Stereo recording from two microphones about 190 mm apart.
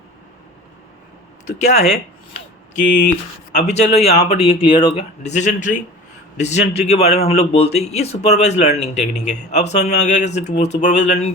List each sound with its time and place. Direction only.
1.5 s a man's voice: 35° left (ahead or behind)
3.5 s a man's voice: 35° left (ahead or behind)